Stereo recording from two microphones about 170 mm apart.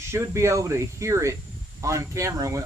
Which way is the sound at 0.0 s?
15° right (ahead or behind).